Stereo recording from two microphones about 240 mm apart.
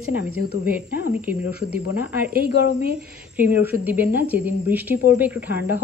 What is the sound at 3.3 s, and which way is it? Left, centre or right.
A woman's voice, centre.